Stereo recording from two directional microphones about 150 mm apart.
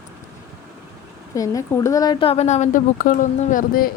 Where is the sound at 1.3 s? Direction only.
25° left (ahead or behind); by 3.9 s 70° left (ahead or behind).